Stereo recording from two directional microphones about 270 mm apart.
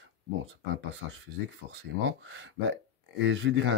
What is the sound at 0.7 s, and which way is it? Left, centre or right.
Speech, right.